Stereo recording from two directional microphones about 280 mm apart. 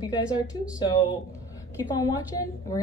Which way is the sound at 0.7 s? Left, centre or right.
Centre.